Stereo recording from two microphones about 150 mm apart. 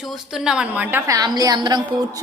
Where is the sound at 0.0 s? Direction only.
Centre (ahead or behind).